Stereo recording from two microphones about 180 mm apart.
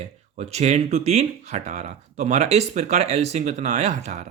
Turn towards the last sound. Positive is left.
turn(degrees=-40)  # may be behind; listen again after turning